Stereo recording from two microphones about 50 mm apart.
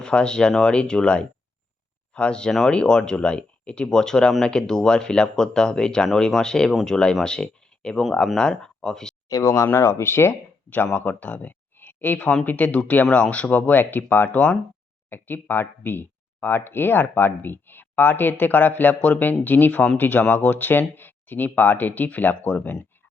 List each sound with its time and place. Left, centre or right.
0.0 s speech: centre
9.4 s speech: left
10.9 s speech: left
14.3 s speech: left
15.1 s speech: left